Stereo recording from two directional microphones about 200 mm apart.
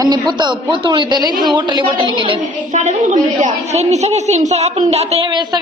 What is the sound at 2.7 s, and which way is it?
A woman's voice, 35° right (ahead or behind).